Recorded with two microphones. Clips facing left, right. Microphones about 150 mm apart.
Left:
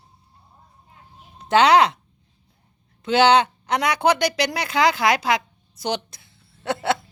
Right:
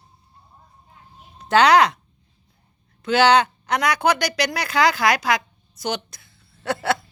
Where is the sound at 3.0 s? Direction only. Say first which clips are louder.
Even; 25° left (ahead or behind).